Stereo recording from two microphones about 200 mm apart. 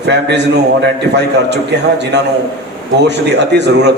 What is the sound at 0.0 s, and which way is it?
A man's voice, 60° right (ahead or behind).